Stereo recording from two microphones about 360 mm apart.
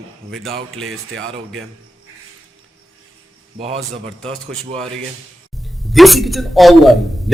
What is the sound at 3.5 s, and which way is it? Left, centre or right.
Speech, centre.